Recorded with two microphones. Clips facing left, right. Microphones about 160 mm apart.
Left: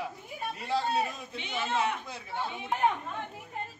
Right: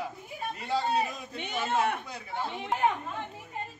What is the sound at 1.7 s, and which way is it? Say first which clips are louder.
Speech: right 2 dB; 50° right (ahead or behind).